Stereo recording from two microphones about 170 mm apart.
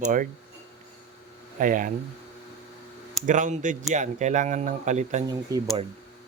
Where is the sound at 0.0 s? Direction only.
50° right (ahead or behind).